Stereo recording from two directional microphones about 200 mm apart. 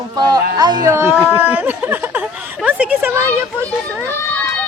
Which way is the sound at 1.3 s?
10° right (ahead or behind).